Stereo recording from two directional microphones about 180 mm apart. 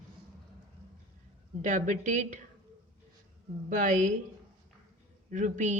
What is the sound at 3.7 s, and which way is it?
Speech, 45° right (ahead or behind).